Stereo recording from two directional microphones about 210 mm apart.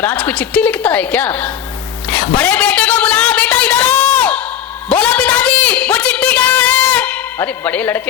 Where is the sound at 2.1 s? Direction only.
5° left (ahead or behind).